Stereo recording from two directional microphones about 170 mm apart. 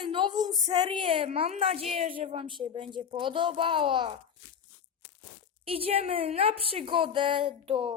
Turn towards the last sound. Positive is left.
turn(degrees=-30)  # may be behind; listen again after turning